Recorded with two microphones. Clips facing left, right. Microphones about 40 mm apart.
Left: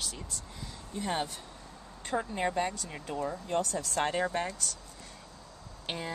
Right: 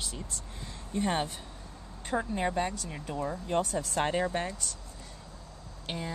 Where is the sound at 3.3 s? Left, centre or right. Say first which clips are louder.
Right 3 dB; right.